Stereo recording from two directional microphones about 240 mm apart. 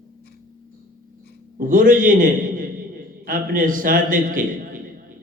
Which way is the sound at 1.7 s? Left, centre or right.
Right.